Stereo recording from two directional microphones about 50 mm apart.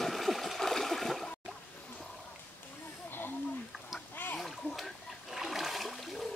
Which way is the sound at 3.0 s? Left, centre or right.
Left.